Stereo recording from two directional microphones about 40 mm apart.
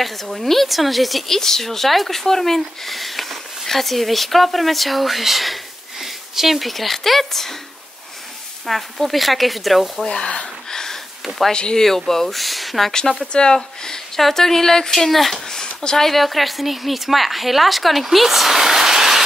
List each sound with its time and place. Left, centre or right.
0.0 s a woman's voice: centre
8.6 s a woman's voice: centre
10.0 s speech: centre
10.7 s a sound: centre
11.2 s a woman's voice: centre
11.5 s speech: left
11.8 s a woman's voice: centre
12.9 s speech: centre
16.1 s a woman's voice: centre